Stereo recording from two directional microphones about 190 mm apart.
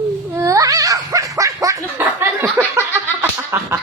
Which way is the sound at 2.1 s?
10° right (ahead or behind).